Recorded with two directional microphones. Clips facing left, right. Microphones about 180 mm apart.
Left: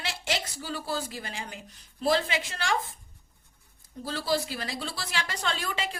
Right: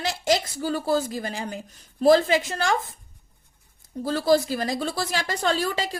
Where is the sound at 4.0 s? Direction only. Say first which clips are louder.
Right 9 dB; 45° right (ahead or behind).